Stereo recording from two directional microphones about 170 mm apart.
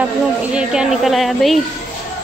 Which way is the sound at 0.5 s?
5° right (ahead or behind).